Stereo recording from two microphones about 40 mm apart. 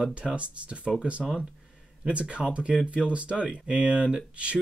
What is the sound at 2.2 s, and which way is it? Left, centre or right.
Speech, right.